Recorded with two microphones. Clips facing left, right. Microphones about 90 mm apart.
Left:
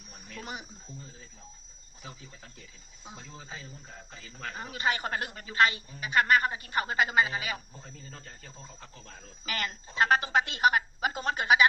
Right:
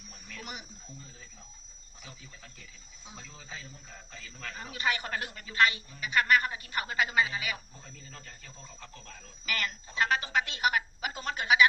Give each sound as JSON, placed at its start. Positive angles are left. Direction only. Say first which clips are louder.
{"t": 2.0, "sound": "a woman's voice", "louder": "left 4 dB", "side_deg": 40}
{"t": 4.2, "sound": "a woman's voice", "louder": "left 3 dB", "side_deg": 35}
{"t": 9.6, "sound": "a woman's voice", "louder": "left 3 dB", "side_deg": 30}